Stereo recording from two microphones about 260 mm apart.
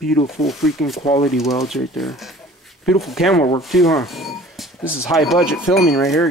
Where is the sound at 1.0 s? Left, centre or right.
Left.